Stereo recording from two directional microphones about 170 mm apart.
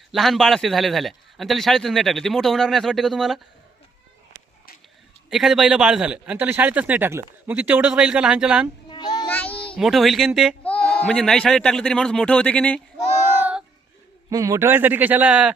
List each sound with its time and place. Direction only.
0.1 s a man's voice: centre (ahead or behind)
5.3 s a man's voice: centre (ahead or behind)
8.9 s child singing: 25° left (ahead or behind)
9.3 s speech: 10° left (ahead or behind)
13.4 s child singing: 5° right (ahead or behind)
14.3 s a man's voice: 20° right (ahead or behind)